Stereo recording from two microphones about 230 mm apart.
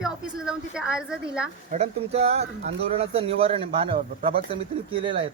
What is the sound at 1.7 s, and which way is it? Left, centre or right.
Speech, right.